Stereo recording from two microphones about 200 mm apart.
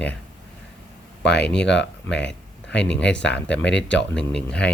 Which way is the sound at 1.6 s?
60° left (ahead or behind).